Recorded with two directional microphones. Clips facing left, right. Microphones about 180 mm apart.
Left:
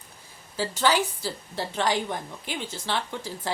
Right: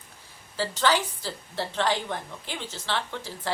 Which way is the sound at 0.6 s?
10° left (ahead or behind).